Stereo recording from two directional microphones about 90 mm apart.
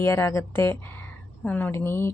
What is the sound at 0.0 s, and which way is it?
A woman's voice, 30° left (ahead or behind).